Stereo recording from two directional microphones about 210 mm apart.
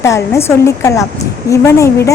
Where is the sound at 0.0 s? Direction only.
15° left (ahead or behind).